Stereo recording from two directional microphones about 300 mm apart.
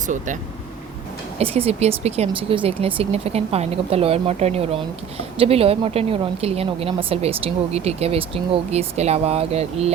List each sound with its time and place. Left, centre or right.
1.4 s a woman's voice: centre